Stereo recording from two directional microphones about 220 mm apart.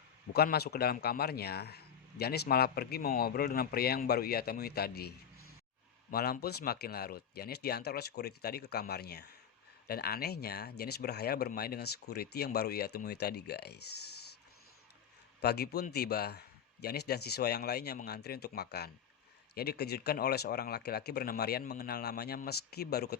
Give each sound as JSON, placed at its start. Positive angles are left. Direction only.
{"t": 0.3, "sound": "a man's voice", "side_deg": 45}
{"t": 15.4, "sound": "a man's voice", "side_deg": 45}